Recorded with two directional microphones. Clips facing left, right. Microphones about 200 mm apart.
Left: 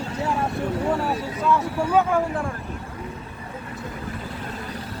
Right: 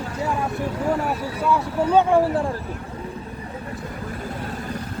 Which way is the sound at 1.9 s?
30° right (ahead or behind).